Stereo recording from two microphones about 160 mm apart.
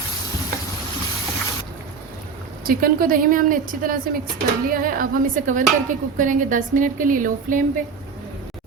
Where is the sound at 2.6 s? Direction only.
65° right (ahead or behind).